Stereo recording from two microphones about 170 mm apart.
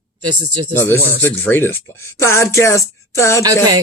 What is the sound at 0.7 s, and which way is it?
Speech, 10° left (ahead or behind).